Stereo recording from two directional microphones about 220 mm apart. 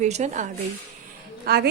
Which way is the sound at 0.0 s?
35° right (ahead or behind).